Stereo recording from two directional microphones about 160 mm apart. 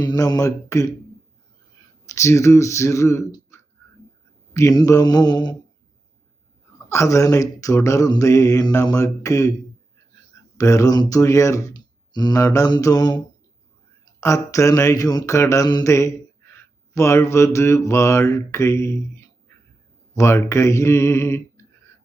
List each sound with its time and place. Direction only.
0.0 s speech: 25° left (ahead or behind)
2.0 s mantra: 20° left (ahead or behind)
4.5 s speech: 20° left (ahead or behind)
6.9 s speech: 20° left (ahead or behind)
10.6 s speech: 20° left (ahead or behind)
14.2 s mantra: 20° left (ahead or behind)
20.1 s mantra: 15° left (ahead or behind)